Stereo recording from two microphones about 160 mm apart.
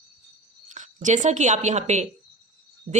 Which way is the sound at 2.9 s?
35° right (ahead or behind).